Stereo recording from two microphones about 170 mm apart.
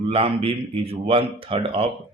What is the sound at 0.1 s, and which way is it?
Speech, 35° right (ahead or behind).